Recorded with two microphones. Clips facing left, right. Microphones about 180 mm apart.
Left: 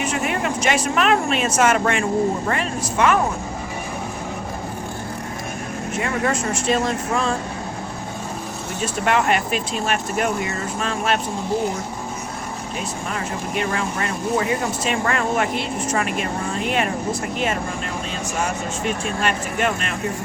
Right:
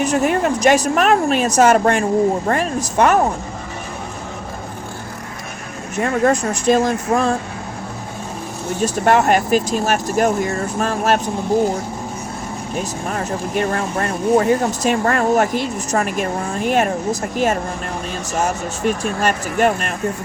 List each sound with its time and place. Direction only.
0.0 s speech: 40° right (ahead or behind)
6.0 s speech: 45° right (ahead or behind)
8.8 s speech: 40° right (ahead or behind)
13.1 s speech: 45° right (ahead or behind)
18.9 s speech: 40° right (ahead or behind)